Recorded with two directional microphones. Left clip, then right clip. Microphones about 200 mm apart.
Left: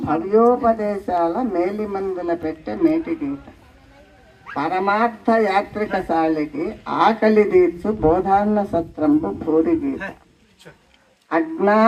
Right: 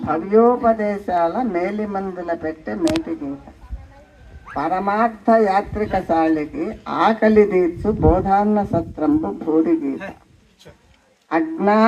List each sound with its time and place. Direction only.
0.1 s speech: 50° right (ahead or behind)
5.2 s speech: 40° right (ahead or behind)
11.3 s speech: 40° right (ahead or behind)